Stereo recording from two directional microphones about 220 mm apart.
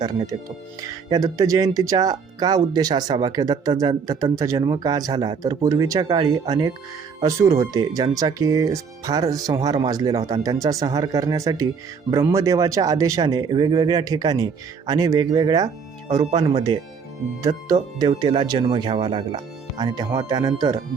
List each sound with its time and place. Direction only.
0.0 s speech: 20° right (ahead or behind)